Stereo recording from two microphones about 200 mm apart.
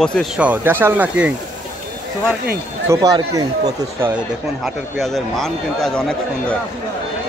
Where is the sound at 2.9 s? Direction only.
20° right (ahead or behind).